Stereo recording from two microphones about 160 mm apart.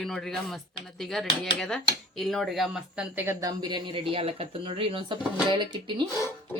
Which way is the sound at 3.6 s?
30° right (ahead or behind).